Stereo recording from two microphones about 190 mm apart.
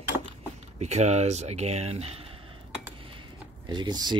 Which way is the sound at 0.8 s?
35° right (ahead or behind).